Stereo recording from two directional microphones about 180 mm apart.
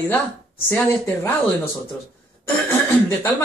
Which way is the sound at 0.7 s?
10° left (ahead or behind).